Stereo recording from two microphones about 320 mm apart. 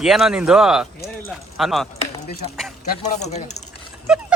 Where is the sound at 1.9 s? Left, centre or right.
Left.